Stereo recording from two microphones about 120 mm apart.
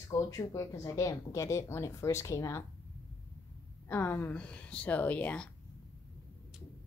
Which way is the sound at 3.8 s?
20° left (ahead or behind).